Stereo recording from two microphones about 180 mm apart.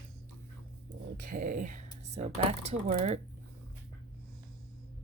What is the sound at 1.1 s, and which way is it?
Speech, 45° right (ahead or behind).